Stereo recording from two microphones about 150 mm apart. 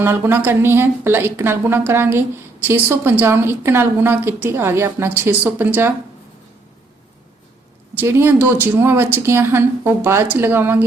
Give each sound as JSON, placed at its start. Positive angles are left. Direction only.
{"t": 0.0, "sound": "a woman's voice", "side_deg": -15}
{"t": 7.9, "sound": "a woman's voice", "side_deg": -15}